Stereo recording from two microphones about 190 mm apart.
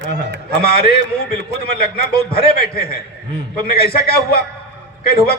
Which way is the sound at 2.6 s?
50° left (ahead or behind).